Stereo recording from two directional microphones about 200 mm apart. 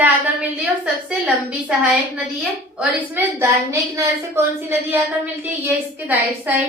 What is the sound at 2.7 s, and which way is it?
A woman's voice, 10° right (ahead or behind).